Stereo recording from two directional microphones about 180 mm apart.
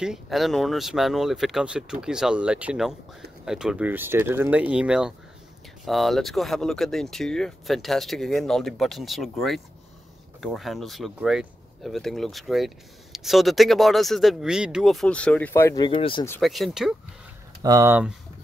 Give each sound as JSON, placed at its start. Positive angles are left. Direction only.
{"t": 0.0, "sound": "speech", "side_deg": 0}
{"t": 16.3, "sound": "speech", "side_deg": 0}
{"t": 17.6, "sound": "speech", "side_deg": -20}